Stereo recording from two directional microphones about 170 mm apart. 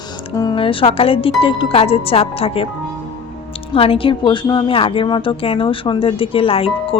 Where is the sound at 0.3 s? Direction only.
25° left (ahead or behind).